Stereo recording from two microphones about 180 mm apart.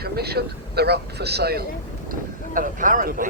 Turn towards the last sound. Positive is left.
turn(degrees=-50)  # may be behind; listen again after turning